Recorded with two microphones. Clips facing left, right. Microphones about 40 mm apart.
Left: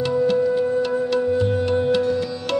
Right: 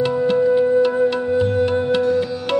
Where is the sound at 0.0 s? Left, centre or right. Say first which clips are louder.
Right 2 dB; centre.